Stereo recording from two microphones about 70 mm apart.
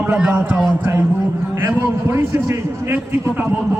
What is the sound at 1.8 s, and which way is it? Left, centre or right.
A man's voice, right.